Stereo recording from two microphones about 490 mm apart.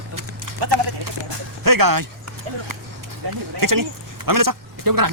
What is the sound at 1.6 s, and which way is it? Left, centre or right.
Speech, right.